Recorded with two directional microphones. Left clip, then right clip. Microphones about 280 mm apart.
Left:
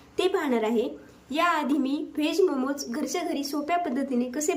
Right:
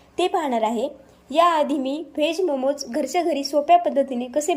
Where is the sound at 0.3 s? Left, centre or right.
Centre.